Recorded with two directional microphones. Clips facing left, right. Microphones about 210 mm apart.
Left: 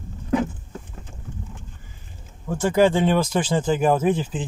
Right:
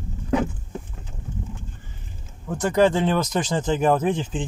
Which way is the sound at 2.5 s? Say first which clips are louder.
Left 1 dB; 10° left (ahead or behind).